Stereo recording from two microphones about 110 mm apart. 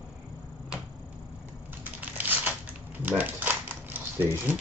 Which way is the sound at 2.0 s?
15° right (ahead or behind).